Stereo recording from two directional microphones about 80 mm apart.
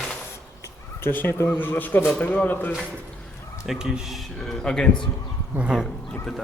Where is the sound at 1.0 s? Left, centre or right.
Left.